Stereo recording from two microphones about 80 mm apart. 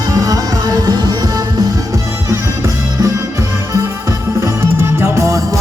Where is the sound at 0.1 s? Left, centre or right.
Right.